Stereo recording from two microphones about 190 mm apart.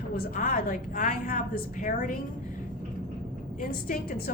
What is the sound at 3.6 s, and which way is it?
Speech, 45° left (ahead or behind).